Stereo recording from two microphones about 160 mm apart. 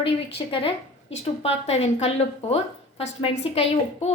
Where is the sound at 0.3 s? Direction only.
35° left (ahead or behind).